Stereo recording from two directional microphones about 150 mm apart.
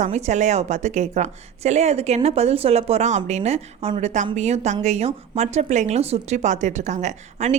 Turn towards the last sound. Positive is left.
turn(degrees=-50)  # may be behind; listen again after turning